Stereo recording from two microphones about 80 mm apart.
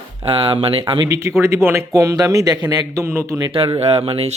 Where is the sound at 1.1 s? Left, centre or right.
Right.